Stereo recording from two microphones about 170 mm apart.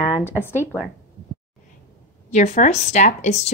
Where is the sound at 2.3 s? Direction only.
45° left (ahead or behind).